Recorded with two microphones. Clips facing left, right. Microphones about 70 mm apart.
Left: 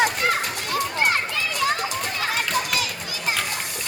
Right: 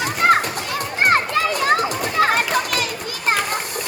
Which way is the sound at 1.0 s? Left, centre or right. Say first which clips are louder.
Right 6 dB; right.